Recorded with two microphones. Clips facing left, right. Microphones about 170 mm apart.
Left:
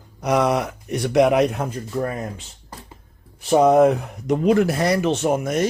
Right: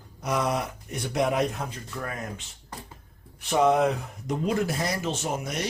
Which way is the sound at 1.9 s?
35° left (ahead or behind).